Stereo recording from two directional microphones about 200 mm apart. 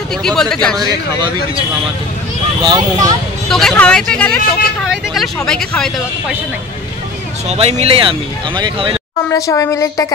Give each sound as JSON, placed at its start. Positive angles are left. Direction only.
{"t": 0.2, "sound": "speech", "side_deg": 5}
{"t": 2.6, "sound": "speech", "side_deg": -20}
{"t": 3.4, "sound": "speech", "side_deg": 0}
{"t": 7.4, "sound": "speech", "side_deg": -30}
{"t": 9.3, "sound": "a woman's voice", "side_deg": 15}